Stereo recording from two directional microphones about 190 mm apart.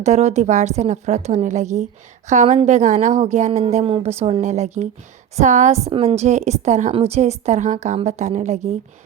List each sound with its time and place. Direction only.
0.0 s a woman's voice: 35° right (ahead or behind)